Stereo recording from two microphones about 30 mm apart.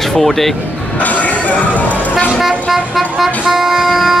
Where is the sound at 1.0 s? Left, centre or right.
Left.